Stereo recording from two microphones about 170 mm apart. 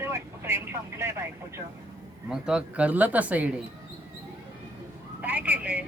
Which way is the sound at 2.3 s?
5° right (ahead or behind).